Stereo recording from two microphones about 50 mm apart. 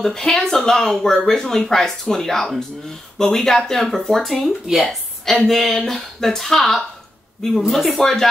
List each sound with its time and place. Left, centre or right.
0.0 s speech: centre